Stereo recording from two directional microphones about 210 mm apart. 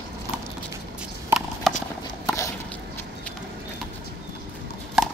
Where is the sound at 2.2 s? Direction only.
15° left (ahead or behind).